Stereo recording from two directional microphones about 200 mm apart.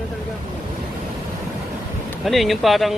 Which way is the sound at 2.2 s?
Centre (ahead or behind).